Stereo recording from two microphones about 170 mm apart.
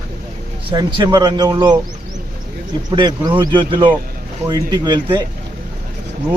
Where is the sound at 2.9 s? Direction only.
25° right (ahead or behind).